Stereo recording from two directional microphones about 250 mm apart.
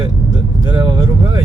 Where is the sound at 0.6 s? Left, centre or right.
Centre.